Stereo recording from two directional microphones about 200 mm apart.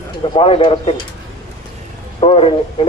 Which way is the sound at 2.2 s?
25° left (ahead or behind).